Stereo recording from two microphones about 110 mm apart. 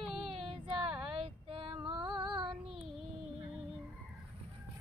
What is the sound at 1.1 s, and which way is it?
Female singing, 60° right (ahead or behind).